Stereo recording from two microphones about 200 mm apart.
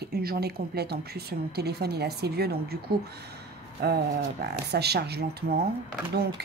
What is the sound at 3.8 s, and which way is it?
Speech, 55° right (ahead or behind).